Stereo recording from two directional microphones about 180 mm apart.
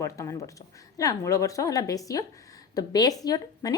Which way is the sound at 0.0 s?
15° left (ahead or behind).